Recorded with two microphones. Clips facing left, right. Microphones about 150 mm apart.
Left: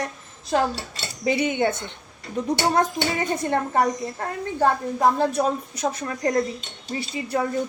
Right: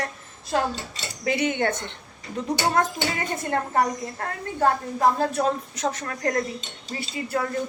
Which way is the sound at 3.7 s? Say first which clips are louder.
Left 2 dB; 15° left (ahead or behind).